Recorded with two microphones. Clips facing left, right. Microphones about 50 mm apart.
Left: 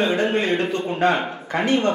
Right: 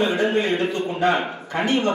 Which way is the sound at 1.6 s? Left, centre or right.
Right.